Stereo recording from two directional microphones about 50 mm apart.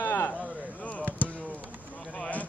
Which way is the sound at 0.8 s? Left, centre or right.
Left.